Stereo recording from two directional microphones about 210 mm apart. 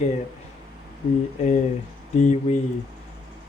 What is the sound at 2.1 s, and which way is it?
Speech, 35° left (ahead or behind).